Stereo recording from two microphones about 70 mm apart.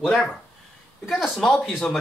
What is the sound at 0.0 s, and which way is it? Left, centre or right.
Speech, centre.